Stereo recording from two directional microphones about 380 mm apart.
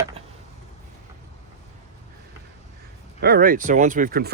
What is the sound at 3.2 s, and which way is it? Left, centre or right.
Speech, right.